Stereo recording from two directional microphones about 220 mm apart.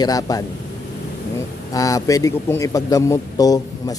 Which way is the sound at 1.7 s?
15° left (ahead or behind).